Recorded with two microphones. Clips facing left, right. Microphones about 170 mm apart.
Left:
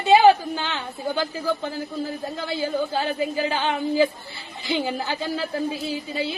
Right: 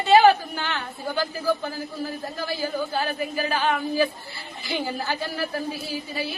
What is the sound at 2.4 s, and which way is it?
A woman's voice, 25° left (ahead or behind).